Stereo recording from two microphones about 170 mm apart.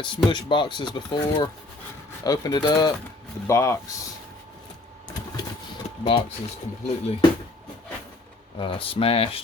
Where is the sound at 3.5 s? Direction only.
15° left (ahead or behind).